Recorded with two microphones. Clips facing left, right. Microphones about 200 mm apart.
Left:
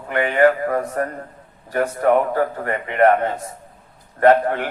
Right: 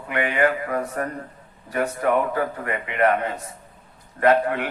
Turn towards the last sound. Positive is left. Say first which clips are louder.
# left 4 dB
turn(degrees=40)  # may be behind; listen again after turning